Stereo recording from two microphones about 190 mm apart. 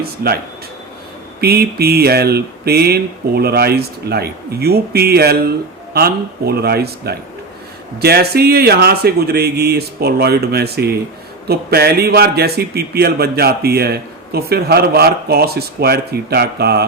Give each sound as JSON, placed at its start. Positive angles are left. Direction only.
{"t": 0.0, "sound": "speech", "side_deg": -55}
{"t": 1.4, "sound": "speech", "side_deg": -55}